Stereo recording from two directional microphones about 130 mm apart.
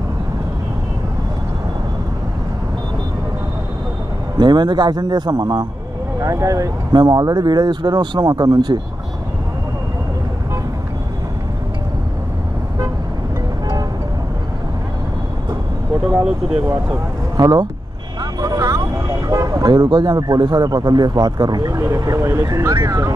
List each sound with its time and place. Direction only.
4.4 s speech: 35° right (ahead or behind)
17.4 s speech: 30° right (ahead or behind)